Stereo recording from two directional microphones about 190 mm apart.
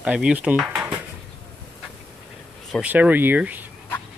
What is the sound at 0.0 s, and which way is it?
Dishes, 5° right (ahead or behind).